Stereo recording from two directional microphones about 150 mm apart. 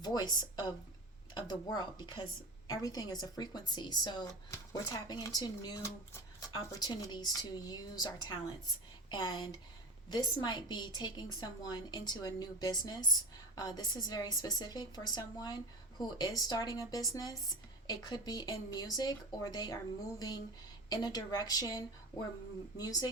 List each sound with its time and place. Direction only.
0.0 s speech: 25° left (ahead or behind)